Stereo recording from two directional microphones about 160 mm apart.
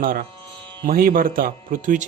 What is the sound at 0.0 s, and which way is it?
Speech, 65° right (ahead or behind).